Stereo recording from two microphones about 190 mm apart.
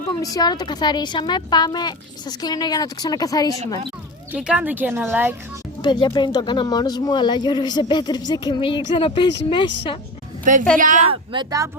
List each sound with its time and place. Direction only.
0.2 s speech: 20° left (ahead or behind)
4.3 s speech: 5° right (ahead or behind)
5.8 s speech: 20° left (ahead or behind)
10.4 s a woman's voice: 45° right (ahead or behind)
11.1 s speech: 25° right (ahead or behind)